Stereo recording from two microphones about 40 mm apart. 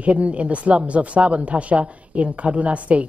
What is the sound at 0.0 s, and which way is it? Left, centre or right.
Speech, right.